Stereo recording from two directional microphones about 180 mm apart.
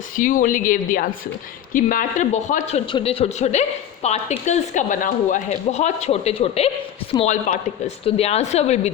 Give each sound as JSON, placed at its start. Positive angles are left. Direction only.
{"t": 0.2, "sound": "speech", "side_deg": 50}